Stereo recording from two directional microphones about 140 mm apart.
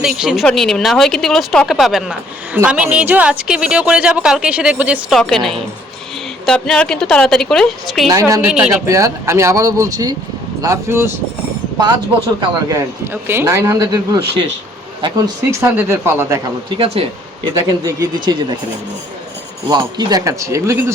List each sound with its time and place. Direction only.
0.2 s speech: 5° right (ahead or behind)
5.1 s speech: centre (ahead or behind)
8.1 s a man's voice: 20° right (ahead or behind)
8.4 s speech: 10° right (ahead or behind)
8.9 s a man's voice: 20° right (ahead or behind)
12.6 s a man's voice: 20° right (ahead or behind)
16.6 s speech: 40° right (ahead or behind)
17.7 s a man's voice: 25° right (ahead or behind)
19.6 s a man's voice: 30° right (ahead or behind)